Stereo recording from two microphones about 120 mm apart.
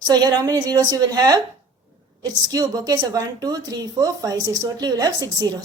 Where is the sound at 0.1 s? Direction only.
35° right (ahead or behind).